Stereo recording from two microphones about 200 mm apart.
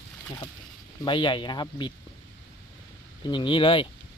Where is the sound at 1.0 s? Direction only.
25° left (ahead or behind).